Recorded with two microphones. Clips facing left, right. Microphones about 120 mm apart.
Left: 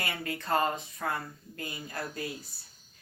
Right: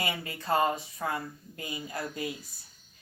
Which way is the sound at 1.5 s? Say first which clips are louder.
Right 1 dB; 15° right (ahead or behind).